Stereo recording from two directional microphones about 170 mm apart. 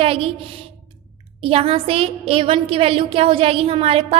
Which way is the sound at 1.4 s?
35° right (ahead or behind).